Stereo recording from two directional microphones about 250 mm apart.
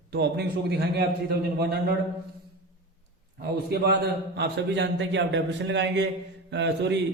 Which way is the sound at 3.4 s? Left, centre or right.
Right.